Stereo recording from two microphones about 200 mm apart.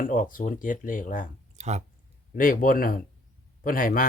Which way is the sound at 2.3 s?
45° left (ahead or behind).